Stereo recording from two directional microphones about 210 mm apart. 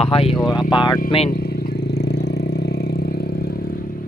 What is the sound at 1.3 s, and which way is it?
Vehicle, 50° left (ahead or behind).